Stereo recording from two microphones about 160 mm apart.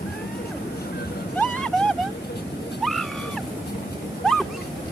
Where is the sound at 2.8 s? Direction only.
Centre (ahead or behind).